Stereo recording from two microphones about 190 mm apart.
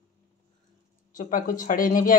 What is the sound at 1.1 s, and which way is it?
Speech, 45° left (ahead or behind).